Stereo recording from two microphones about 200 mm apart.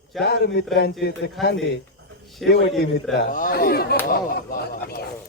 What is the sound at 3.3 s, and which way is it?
Speech, 40° left (ahead or behind).